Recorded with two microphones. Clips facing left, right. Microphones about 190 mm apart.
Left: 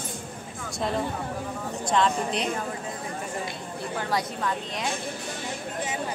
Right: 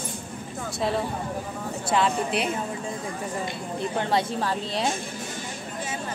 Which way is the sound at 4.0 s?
25° right (ahead or behind).